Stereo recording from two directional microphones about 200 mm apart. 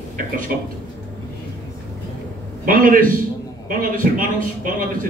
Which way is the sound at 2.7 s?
45° right (ahead or behind).